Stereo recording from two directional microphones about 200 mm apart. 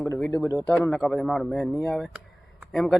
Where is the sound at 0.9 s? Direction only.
Centre (ahead or behind).